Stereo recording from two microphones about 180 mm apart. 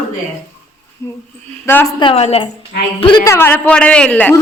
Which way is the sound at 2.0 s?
30° left (ahead or behind).